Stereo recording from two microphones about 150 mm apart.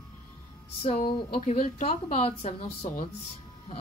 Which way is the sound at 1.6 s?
50° left (ahead or behind).